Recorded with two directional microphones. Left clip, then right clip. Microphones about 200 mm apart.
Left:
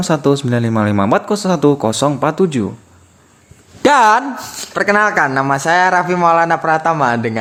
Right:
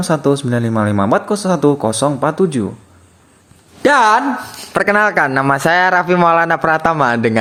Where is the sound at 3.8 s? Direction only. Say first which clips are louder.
Left 1 dB; 30° left (ahead or behind).